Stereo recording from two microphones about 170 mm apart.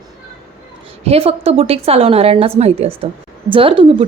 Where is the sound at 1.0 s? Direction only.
35° right (ahead or behind).